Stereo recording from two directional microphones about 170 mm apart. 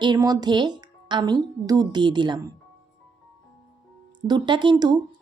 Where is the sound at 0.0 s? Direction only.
25° right (ahead or behind).